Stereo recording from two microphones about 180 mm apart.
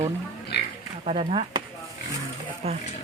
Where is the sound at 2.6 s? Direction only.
35° right (ahead or behind).